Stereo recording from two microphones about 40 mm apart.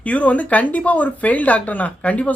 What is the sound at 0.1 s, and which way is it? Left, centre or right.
Speech, left.